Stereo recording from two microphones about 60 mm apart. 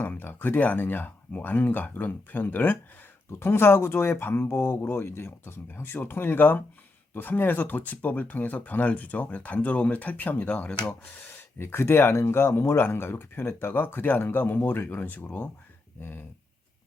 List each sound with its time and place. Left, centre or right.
0.1 s speech: left
3.4 s speech: left
11.3 s speech: left